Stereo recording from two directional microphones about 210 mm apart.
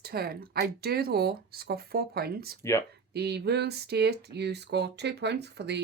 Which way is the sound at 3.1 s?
50° right (ahead or behind).